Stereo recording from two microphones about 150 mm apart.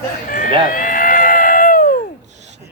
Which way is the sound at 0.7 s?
65° left (ahead or behind).